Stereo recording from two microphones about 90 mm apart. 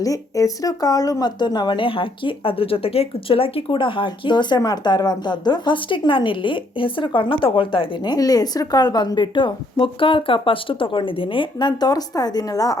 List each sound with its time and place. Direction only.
0.0 s speech: 40° left (ahead or behind)
1.4 s speech: 55° left (ahead or behind); by 7.9 s 75° left (ahead or behind)
8.0 s a woman's voice: 45° left (ahead or behind)